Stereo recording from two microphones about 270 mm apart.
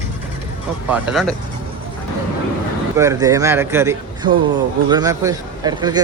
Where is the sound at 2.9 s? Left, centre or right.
Centre.